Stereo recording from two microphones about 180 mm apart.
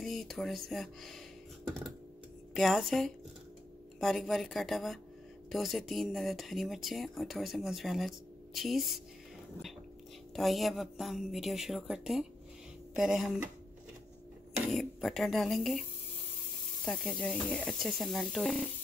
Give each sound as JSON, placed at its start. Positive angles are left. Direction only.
{"t": 0.0, "sound": "speech", "side_deg": 0}
{"t": 10.3, "sound": "speech", "side_deg": 0}
{"t": 14.7, "sound": "speech", "side_deg": 0}
{"t": 16.8, "sound": "speech", "side_deg": 5}